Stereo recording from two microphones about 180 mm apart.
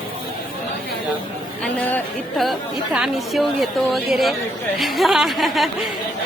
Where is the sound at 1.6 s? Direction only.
5° left (ahead or behind).